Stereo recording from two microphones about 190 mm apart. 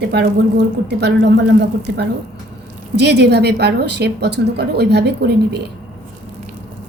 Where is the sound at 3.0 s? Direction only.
60° right (ahead or behind).